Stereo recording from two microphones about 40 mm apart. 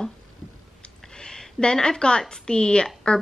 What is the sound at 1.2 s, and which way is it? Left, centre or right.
A woman's voice, centre.